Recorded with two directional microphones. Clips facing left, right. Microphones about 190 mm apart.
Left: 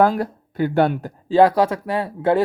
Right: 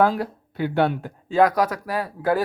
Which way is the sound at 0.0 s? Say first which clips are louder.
Left 3 dB; 45° left (ahead or behind).